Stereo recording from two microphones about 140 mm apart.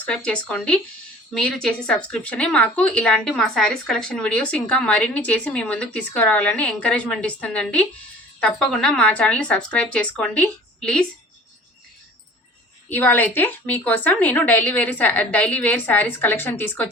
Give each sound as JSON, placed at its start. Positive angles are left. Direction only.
{"t": 0.0, "sound": "a woman's voice", "side_deg": 5}
{"t": 12.9, "sound": "a woman's voice", "side_deg": 15}